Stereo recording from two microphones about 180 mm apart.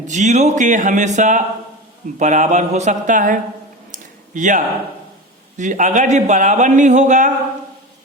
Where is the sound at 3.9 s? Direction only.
45° right (ahead or behind).